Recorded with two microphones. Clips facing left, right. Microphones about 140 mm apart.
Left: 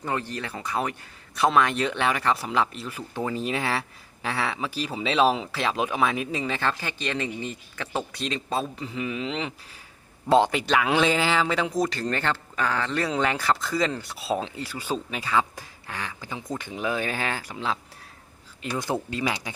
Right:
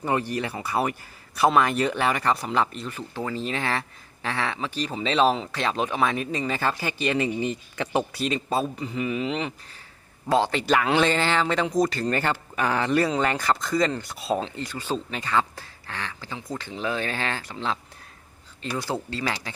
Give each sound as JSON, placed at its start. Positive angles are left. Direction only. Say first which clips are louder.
{"t": 0.0, "sound": "speech", "louder": "right 4 dB", "side_deg": -15}
{"t": 3.2, "sound": "speech", "louder": "left 2 dB", "side_deg": 15}
{"t": 6.6, "sound": "speech", "louder": "right 2 dB", "side_deg": -10}
{"t": 8.2, "sound": "speech", "louder": "right 3 dB", "side_deg": -5}
{"t": 10.2, "sound": "speech", "louder": "left 3 dB", "side_deg": 20}
{"t": 10.7, "sound": "speech", "louder": "right 1 dB", "side_deg": 0}
{"t": 13.0, "sound": "speech", "louder": "right 2 dB", "side_deg": 0}
{"t": 19.1, "sound": "speech", "louder": "left 1 dB", "side_deg": 15}